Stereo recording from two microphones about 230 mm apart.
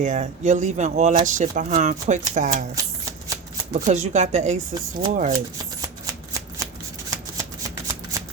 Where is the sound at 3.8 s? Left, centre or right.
Right.